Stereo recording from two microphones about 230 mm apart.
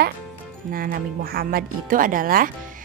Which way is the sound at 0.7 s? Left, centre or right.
Right.